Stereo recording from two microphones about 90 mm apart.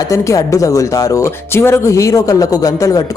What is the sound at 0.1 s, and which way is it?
Speech, 35° left (ahead or behind).